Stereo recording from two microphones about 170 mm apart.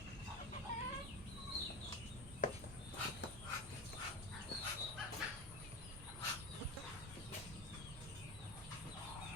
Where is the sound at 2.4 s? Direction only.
50° left (ahead or behind).